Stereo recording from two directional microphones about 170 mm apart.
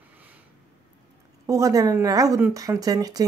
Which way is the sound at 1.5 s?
20° right (ahead or behind).